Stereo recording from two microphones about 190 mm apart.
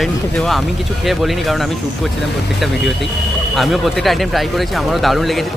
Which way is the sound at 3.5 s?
Centre (ahead or behind).